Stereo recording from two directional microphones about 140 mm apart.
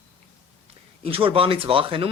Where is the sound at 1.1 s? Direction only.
40° right (ahead or behind).